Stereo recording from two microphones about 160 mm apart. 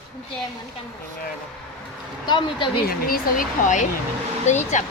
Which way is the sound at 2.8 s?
60° left (ahead or behind).